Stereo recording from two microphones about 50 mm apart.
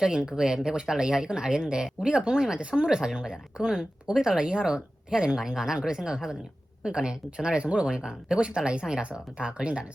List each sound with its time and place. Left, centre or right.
0.0 s speech: centre